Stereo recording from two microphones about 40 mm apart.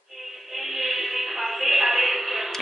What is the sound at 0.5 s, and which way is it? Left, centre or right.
Music, centre.